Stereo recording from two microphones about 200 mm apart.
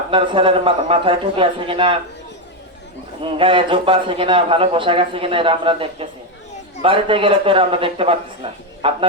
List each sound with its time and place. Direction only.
0.1 s a man's voice: 25° right (ahead or behind)
3.2 s a man's voice: 25° right (ahead or behind)